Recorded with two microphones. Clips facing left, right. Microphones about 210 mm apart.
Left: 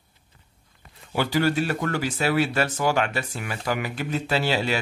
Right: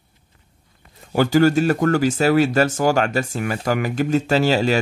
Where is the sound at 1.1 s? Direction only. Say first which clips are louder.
Right 7 dB; 45° right (ahead or behind).